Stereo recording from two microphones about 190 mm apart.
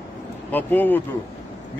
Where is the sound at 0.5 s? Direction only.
10° left (ahead or behind).